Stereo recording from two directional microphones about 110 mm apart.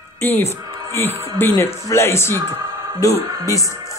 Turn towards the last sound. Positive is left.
turn(degrees=30)  # may be behind; listen again after turning